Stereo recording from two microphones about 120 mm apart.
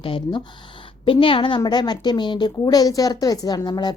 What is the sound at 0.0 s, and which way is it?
A woman's voice, 45° left (ahead or behind).